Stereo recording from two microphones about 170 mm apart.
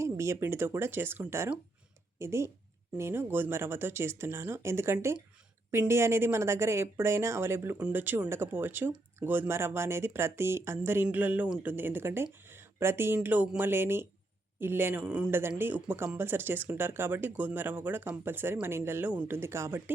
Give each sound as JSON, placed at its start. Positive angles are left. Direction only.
{"t": 0.0, "sound": "speech", "side_deg": -15}